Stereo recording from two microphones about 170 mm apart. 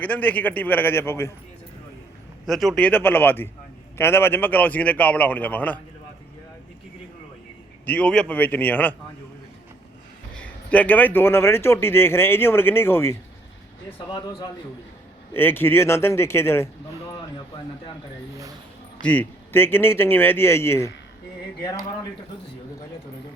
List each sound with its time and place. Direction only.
0.0 s a man's voice: 10° left (ahead or behind)
2.5 s a man's voice: centre (ahead or behind)
7.9 s a man's voice: 5° left (ahead or behind)
10.3 s a man's voice: 10° left (ahead or behind)
14.1 s a man's voice: 25° left (ahead or behind)
15.3 s a man's voice: 10° left (ahead or behind)
17.1 s a sound: 30° left (ahead or behind)
19.0 s a man's voice: 10° left (ahead or behind)